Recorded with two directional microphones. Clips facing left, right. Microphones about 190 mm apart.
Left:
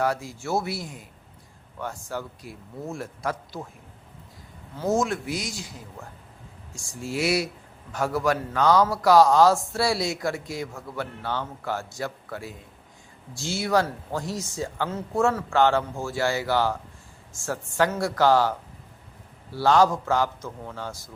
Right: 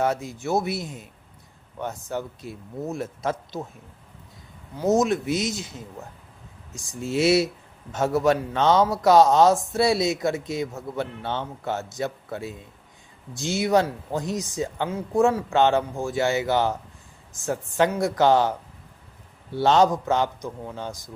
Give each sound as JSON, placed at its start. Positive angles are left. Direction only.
{"t": 0.0, "sound": "speech", "side_deg": -20}
{"t": 4.8, "sound": "speech", "side_deg": -20}